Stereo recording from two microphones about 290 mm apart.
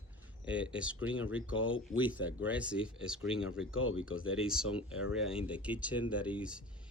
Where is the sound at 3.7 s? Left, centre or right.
Left.